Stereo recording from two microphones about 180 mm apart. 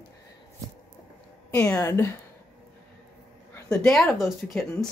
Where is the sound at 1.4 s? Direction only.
15° left (ahead or behind).